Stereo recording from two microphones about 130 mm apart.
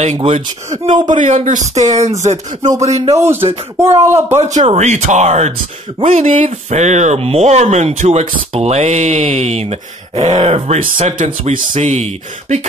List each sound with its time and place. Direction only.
0.2 s speech: 45° right (ahead or behind)
1.0 s speech: 75° right (ahead or behind); by 3.2 s 55° right (ahead or behind)
3.2 s speech: 15° right (ahead or behind)
4.4 s speech: 55° right (ahead or behind)
10.5 s speech: 70° right (ahead or behind)